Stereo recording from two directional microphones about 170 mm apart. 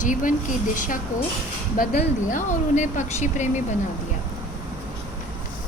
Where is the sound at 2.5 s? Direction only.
45° left (ahead or behind).